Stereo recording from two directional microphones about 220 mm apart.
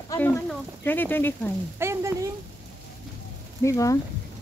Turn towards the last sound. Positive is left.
turn(degrees=15)  # may be behind; listen again after turning